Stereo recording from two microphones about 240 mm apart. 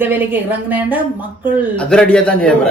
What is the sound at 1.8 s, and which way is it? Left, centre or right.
Speech, centre.